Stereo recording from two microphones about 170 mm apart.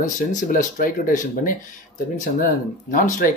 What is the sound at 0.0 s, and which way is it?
Speech, 50° left (ahead or behind).